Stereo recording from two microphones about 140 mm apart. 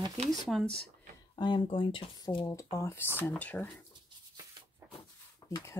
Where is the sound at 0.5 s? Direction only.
5° left (ahead or behind).